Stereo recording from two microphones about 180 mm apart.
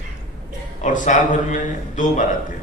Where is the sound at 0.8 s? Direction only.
45° left (ahead or behind).